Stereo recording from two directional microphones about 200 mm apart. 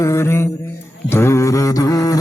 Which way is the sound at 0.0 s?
15° left (ahead or behind).